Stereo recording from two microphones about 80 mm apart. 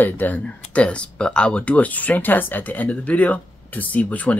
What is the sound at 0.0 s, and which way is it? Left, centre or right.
Speech, left.